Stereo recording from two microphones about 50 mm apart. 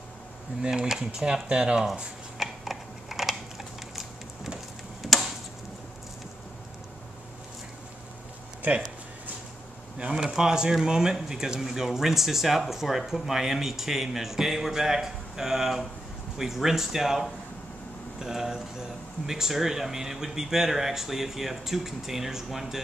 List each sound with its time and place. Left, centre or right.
0.6 s speech: centre
2.3 s a sound: centre
9.9 s speech: centre